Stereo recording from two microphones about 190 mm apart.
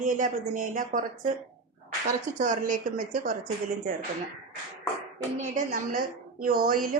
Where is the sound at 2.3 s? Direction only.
40° right (ahead or behind).